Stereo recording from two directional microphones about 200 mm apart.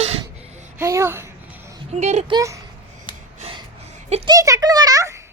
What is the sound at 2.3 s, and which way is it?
Speech, 15° right (ahead or behind).